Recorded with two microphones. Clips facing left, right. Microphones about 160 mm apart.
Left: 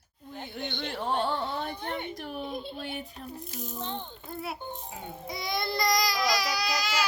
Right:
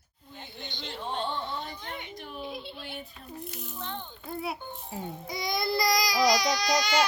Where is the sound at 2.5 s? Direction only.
45° left (ahead or behind).